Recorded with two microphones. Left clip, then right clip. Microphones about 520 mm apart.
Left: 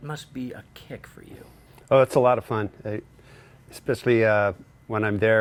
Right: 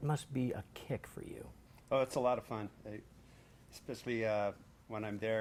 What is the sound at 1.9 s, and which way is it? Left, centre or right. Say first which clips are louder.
Speech: left 15 dB; left.